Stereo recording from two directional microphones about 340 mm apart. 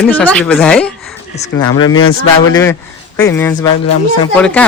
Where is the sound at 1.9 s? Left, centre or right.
Left.